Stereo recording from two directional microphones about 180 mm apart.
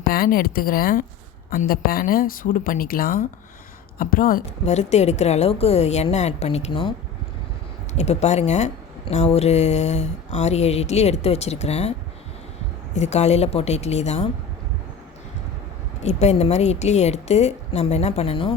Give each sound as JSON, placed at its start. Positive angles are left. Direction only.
{"t": 0.0, "sound": "speech", "side_deg": 55}
{"t": 4.6, "sound": "speech", "side_deg": 40}
{"t": 7.9, "sound": "speech", "side_deg": 35}
{"t": 16.0, "sound": "speech", "side_deg": 40}